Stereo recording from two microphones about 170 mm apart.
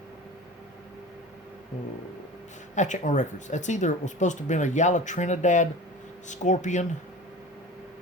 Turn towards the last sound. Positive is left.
turn(degrees=45)  # may be behind; listen again after turning